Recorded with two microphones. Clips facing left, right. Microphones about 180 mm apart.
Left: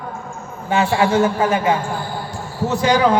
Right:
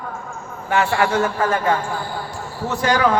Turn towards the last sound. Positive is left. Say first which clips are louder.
# left 3 dB
turn(degrees=20)  # may be behind; listen again after turning